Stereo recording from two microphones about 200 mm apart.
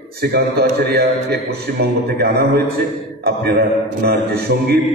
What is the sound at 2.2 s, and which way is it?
Speech, 55° right (ahead or behind).